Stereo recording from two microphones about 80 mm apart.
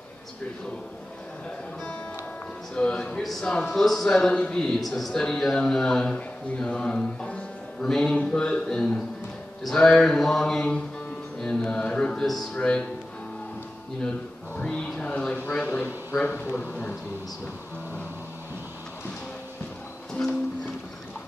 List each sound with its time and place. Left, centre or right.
2.7 s a man's voice: centre
14.6 s speech: centre
14.9 s a sound: centre
15.5 s a man's voice: centre